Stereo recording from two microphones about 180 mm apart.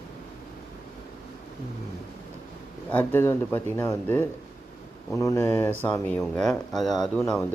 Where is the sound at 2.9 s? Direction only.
10° left (ahead or behind).